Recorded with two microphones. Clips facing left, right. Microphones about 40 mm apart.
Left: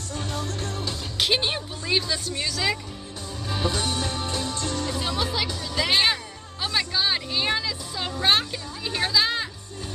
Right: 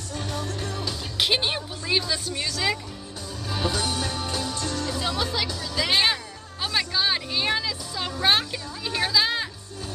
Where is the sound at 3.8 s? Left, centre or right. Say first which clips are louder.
Even; left.